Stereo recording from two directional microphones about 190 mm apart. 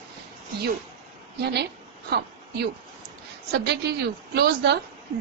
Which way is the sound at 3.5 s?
60° right (ahead or behind).